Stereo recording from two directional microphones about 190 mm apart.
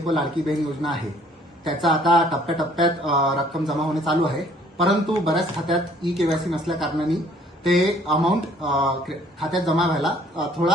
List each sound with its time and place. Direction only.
0.1 s speech: centre (ahead or behind)